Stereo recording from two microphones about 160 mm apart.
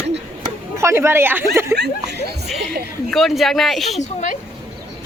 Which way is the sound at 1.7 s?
90° right.